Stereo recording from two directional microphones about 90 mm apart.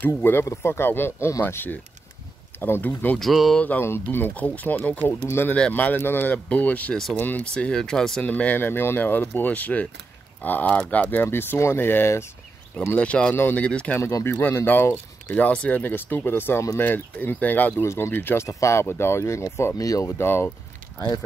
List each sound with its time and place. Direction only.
0.0 s speech: 25° left (ahead or behind)
3.2 s speech: centre (ahead or behind)
3.5 s speech: 20° left (ahead or behind)
5.2 s speech: 30° left (ahead or behind)
5.5 s speech: 15° left (ahead or behind)
12.9 s speech: 15° left (ahead or behind)
14.2 s speech: 25° left (ahead or behind)
19.8 s speech: 40° left (ahead or behind)
20.1 s speech: 25° left (ahead or behind)